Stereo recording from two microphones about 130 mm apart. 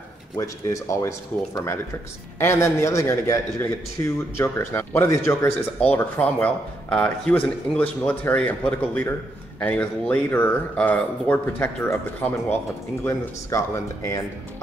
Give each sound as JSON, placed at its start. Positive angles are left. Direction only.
{"t": 0.4, "sound": "a man's voice", "side_deg": 25}
{"t": 6.1, "sound": "a man's voice", "side_deg": 10}